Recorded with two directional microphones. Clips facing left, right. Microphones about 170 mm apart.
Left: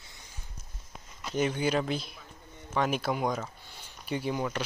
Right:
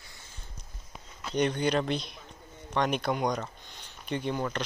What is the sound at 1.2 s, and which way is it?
Speech, 5° left (ahead or behind).